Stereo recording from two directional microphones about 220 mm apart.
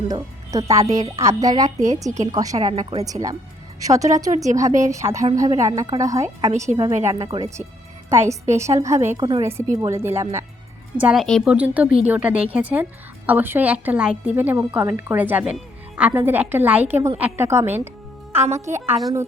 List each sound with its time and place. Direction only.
0.1 s a woman's voice: 15° right (ahead or behind)
7.3 s speech: 25° right (ahead or behind)
8.1 s a woman's voice: 10° right (ahead or behind)
18.3 s a woman's voice: 30° right (ahead or behind)